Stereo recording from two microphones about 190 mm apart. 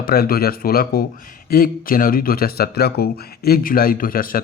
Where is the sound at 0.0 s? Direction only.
55° left (ahead or behind).